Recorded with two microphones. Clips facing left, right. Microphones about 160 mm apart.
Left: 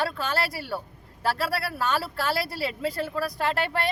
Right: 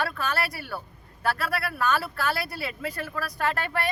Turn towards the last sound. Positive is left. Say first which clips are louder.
# left 1 dB
turn(degrees=25)  # may be behind; listen again after turning